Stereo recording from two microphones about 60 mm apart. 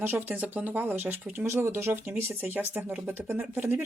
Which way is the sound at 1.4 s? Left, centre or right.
Right.